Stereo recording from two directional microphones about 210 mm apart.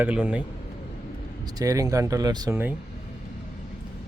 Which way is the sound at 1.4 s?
15° right (ahead or behind).